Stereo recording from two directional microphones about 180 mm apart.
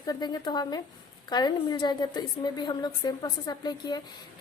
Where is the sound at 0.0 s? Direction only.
25° left (ahead or behind).